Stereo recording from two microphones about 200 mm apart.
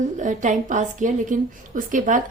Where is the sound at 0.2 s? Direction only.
40° right (ahead or behind).